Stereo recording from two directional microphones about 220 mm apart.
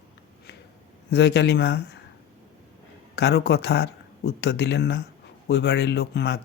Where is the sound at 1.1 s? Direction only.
50° left (ahead or behind).